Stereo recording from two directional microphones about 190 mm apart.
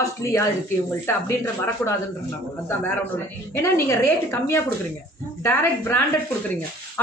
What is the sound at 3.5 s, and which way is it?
A woman's voice, 10° left (ahead or behind).